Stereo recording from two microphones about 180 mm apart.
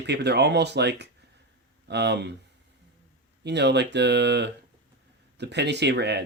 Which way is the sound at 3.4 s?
70° right (ahead or behind).